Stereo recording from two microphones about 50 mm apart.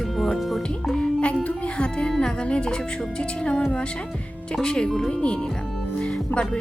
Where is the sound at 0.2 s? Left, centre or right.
Centre.